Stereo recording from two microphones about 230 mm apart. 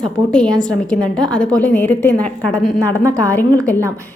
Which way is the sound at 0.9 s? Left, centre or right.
Centre.